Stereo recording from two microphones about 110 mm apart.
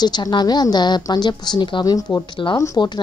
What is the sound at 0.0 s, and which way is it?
A woman's voice, 40° left (ahead or behind).